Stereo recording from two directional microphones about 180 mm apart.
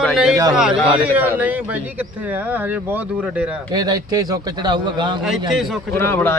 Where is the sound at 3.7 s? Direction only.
20° right (ahead or behind).